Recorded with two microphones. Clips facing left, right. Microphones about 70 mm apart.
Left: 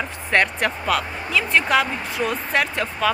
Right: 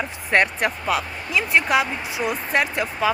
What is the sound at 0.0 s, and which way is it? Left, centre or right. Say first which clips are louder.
Speech: even; centre.